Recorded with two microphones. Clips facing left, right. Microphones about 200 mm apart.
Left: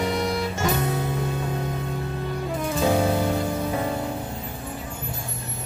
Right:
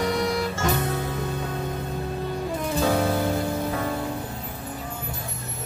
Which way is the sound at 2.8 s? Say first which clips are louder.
Left 2 dB; 20° left (ahead or behind).